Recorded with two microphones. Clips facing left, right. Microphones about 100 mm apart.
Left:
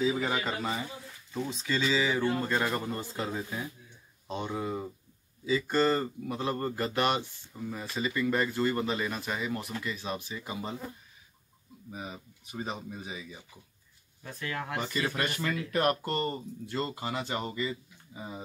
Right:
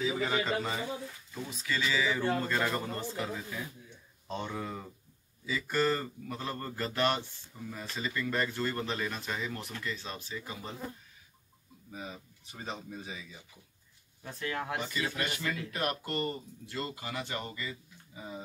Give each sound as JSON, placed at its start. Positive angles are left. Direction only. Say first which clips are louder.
{"t": 0.0, "sound": "speech", "louder": "left 2 dB", "side_deg": 15}
{"t": 1.3, "sound": "speech", "louder": "left 5 dB", "side_deg": 25}
{"t": 3.2, "sound": "speech", "louder": "left 3 dB", "side_deg": 25}
{"t": 11.9, "sound": "speech", "louder": "left 2 dB", "side_deg": 15}
{"t": 14.2, "sound": "speech", "louder": "even", "side_deg": -25}
{"t": 15.0, "sound": "speech", "louder": "left 3 dB", "side_deg": 50}